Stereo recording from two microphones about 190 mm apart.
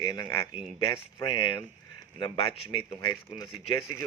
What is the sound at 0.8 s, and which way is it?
Speech, 30° left (ahead or behind).